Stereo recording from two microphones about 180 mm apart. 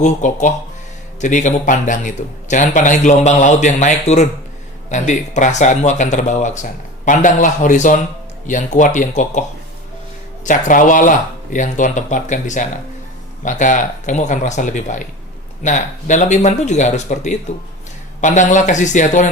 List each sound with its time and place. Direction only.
0.0 s speech: 45° left (ahead or behind)
10.4 s speech: 45° left (ahead or behind)